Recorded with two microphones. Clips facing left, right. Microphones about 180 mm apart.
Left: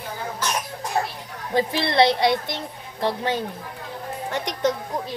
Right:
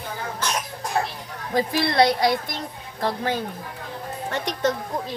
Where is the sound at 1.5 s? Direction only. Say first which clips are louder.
Even; 20° left (ahead or behind).